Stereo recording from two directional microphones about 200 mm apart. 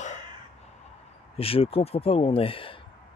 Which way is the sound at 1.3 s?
30° left (ahead or behind).